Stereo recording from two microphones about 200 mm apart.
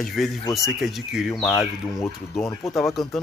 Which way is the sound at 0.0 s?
Centre (ahead or behind).